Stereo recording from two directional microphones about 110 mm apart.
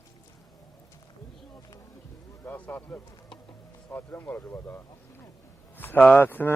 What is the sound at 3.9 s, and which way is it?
Speech, 20° left (ahead or behind).